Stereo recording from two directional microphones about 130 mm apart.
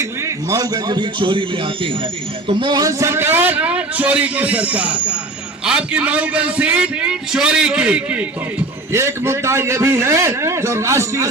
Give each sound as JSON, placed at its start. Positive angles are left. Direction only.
{"t": 0.0, "sound": "a man's voice", "side_deg": -25}
{"t": 8.9, "sound": "a man's voice", "side_deg": -20}